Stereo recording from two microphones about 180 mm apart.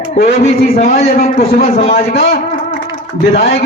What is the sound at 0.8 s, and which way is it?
Speech, 35° left (ahead or behind).